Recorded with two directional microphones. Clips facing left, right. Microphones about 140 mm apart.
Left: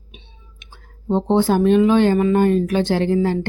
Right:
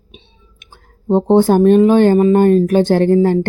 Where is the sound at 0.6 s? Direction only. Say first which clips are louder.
Right 3 dB; 45° right (ahead or behind).